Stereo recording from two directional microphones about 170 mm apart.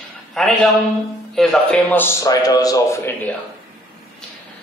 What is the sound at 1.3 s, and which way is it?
A man's voice, centre (ahead or behind).